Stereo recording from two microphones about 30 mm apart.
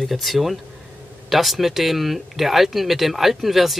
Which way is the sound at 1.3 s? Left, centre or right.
Centre.